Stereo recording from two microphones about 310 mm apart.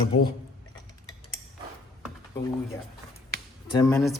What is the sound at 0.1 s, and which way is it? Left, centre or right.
Speech, left.